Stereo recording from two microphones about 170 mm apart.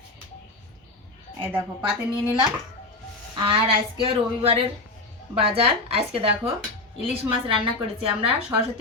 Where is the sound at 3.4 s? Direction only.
30° right (ahead or behind).